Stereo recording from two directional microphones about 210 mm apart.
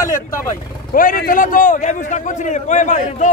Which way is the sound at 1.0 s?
40° left (ahead or behind).